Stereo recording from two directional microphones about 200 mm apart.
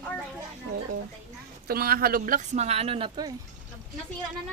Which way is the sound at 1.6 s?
50° right (ahead or behind).